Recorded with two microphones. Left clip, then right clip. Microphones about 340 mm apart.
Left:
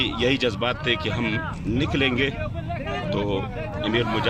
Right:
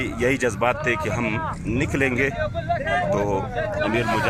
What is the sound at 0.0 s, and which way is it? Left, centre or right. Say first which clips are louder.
Speech: even; centre.